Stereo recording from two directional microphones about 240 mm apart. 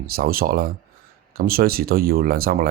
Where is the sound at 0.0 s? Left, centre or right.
Right.